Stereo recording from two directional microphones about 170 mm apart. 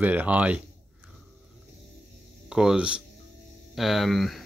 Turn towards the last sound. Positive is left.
turn(degrees=0)  # may be behind; listen again after turning